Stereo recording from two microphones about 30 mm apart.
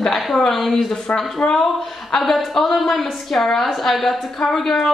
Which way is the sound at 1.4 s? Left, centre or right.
Left.